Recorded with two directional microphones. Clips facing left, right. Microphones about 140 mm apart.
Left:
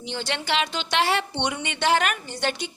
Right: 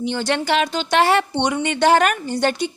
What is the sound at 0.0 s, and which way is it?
A woman's voice, 50° right (ahead or behind).